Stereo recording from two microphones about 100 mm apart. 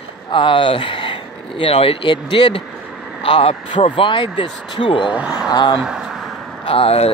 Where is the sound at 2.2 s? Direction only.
55° left (ahead or behind).